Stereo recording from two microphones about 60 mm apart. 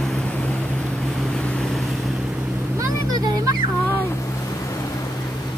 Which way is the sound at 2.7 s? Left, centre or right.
Right.